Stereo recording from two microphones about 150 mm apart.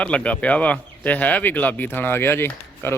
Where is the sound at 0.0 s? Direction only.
10° left (ahead or behind).